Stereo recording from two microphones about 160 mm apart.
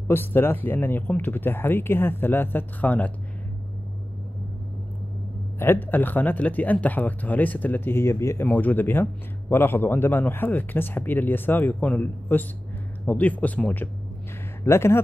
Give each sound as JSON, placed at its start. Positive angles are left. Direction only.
{"t": 0.1, "sound": "speech", "side_deg": 15}
{"t": 5.6, "sound": "speech", "side_deg": 15}